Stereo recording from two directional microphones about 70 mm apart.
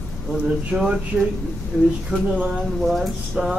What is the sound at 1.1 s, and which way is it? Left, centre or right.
Speech, centre.